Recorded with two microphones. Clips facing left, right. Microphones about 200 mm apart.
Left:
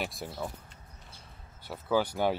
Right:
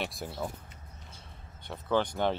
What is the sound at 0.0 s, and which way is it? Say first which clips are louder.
Speech: even; centre (ahead or behind).